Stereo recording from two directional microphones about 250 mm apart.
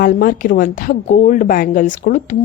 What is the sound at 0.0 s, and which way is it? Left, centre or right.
A woman's voice, left.